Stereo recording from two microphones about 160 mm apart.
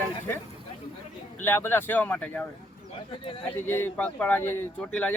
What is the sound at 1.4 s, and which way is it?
Speech, 15° left (ahead or behind).